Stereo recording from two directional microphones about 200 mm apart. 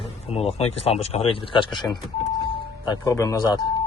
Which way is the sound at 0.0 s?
30° left (ahead or behind).